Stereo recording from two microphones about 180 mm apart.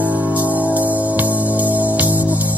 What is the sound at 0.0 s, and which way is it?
Music, 10° right (ahead or behind).